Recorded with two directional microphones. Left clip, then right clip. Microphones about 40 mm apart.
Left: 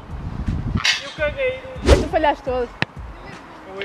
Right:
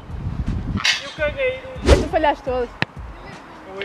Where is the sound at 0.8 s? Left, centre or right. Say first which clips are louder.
Even; left.